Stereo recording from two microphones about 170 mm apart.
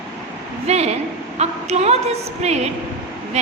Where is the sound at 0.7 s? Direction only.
40° right (ahead or behind).